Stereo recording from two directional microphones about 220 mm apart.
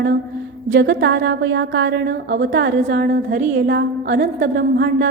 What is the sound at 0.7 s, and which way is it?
A woman's voice, 50° right (ahead or behind).